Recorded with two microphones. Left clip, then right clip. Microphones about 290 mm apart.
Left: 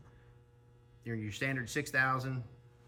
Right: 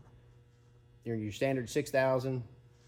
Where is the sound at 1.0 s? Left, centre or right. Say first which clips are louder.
Right 4 dB; centre.